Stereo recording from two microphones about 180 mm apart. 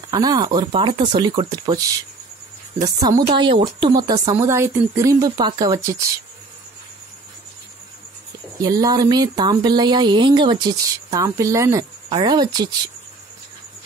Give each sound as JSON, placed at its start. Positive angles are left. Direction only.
{"t": 0.1, "sound": "speech", "side_deg": -25}
{"t": 8.6, "sound": "speech", "side_deg": -20}